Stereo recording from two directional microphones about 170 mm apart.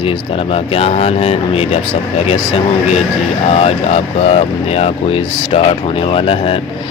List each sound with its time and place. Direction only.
0.5 s speech: 35° left (ahead or behind)
3.5 s speech: 35° left (ahead or behind)